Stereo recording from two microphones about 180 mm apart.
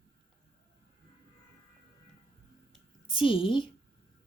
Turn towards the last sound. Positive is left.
turn(degrees=30)  # may be behind; listen again after turning